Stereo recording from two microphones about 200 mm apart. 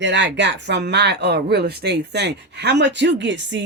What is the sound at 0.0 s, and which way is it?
Speech, 65° right (ahead or behind).